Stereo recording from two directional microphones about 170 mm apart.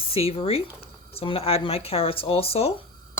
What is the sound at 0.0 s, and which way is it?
Speech, 35° left (ahead or behind).